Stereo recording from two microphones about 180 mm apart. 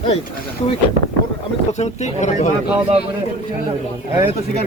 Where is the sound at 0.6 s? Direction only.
35° left (ahead or behind).